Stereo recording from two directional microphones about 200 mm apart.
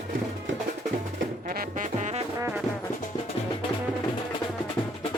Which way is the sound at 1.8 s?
35° right (ahead or behind).